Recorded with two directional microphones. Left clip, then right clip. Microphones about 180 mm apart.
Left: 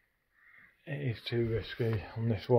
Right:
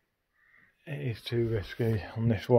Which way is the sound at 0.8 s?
15° right (ahead or behind).